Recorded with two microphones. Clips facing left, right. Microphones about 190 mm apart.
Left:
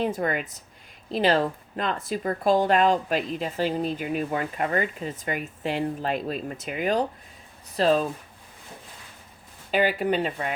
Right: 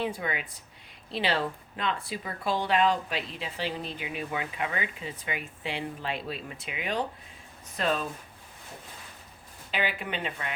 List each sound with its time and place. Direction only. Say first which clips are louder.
0.0 s speech: left 6 dB; 45° left (ahead or behind)
9.7 s speech: left 9 dB; 40° left (ahead or behind)